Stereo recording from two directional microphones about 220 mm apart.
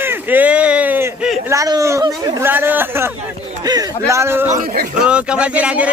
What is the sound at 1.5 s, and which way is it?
Speech, 15° right (ahead or behind).